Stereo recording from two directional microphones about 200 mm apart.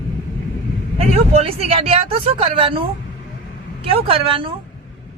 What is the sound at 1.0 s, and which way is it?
Speech, 30° right (ahead or behind).